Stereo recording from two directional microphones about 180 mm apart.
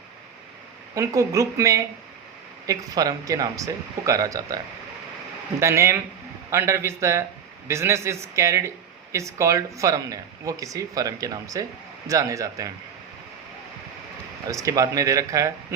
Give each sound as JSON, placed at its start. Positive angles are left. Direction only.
{"t": 0.9, "sound": "speech", "side_deg": -15}
{"t": 14.4, "sound": "speech", "side_deg": -20}